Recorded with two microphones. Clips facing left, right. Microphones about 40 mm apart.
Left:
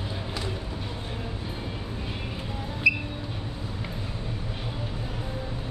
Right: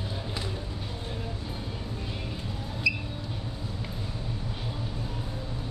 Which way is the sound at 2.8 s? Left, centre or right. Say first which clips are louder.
Left 5 dB; left.